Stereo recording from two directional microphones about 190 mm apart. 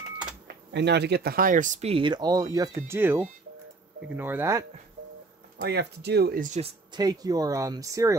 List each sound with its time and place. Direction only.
0.7 s speech: 60° right (ahead or behind); by 4.6 s 15° right (ahead or behind)
5.6 s speech: 60° right (ahead or behind)
6.6 s speech: 20° right (ahead or behind)